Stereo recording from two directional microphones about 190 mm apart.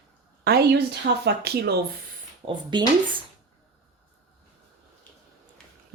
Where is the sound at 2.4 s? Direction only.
30° right (ahead or behind).